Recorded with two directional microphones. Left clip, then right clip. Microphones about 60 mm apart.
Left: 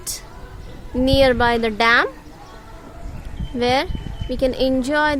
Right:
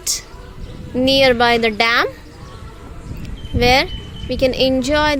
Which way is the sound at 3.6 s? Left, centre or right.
Centre.